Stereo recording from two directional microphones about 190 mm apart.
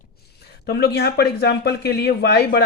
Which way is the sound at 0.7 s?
60° left (ahead or behind).